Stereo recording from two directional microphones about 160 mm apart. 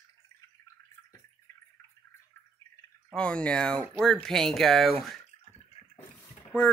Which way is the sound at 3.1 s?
5° left (ahead or behind).